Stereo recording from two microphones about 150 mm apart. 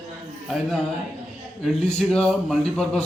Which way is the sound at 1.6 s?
5° left (ahead or behind).